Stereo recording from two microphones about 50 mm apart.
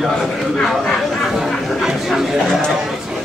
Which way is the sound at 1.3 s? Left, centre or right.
Centre.